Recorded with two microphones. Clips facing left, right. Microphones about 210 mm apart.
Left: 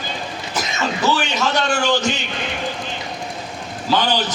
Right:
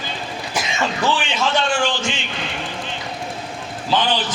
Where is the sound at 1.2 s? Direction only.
40° left (ahead or behind).